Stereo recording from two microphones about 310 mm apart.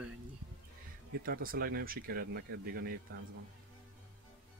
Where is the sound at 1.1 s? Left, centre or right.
Right.